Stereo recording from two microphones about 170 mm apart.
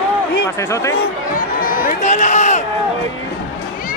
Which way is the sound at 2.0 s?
45° left (ahead or behind).